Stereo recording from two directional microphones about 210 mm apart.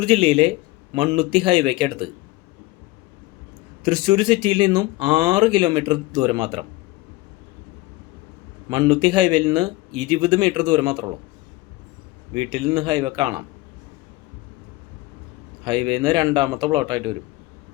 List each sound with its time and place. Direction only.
0.0 s speech: 25° right (ahead or behind)
3.8 s speech: 20° right (ahead or behind)
8.7 s speech: 20° right (ahead or behind)
12.3 s speech: 20° right (ahead or behind)
15.6 s speech: 20° right (ahead or behind)